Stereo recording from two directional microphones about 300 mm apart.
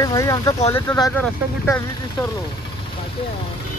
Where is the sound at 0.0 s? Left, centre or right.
Centre.